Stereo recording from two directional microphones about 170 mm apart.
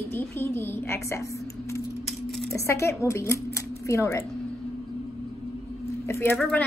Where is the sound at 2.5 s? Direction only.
15° left (ahead or behind).